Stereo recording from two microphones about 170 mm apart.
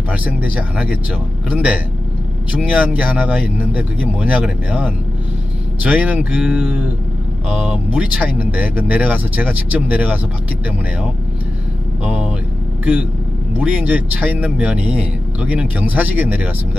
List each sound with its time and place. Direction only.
0.1 s speech: 10° right (ahead or behind)
12.0 s vehicle: 5° right (ahead or behind)
13.6 s speech: 10° right (ahead or behind)